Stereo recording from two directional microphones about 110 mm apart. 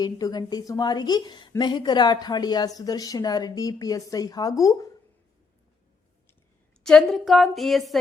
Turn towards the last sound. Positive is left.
turn(degrees=0)  # may be behind; listen again after turning